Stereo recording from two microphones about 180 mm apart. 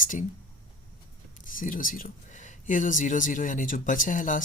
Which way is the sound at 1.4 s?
50° left (ahead or behind).